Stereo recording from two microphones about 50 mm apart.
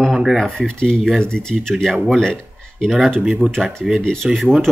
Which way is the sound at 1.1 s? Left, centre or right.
Centre.